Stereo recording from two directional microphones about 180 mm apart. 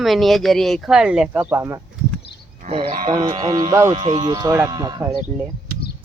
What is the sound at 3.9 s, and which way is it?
Speech, 30° right (ahead or behind).